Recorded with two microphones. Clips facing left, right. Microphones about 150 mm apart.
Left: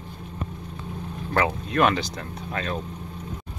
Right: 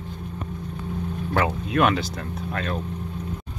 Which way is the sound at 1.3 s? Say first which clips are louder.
Even; centre (ahead or behind).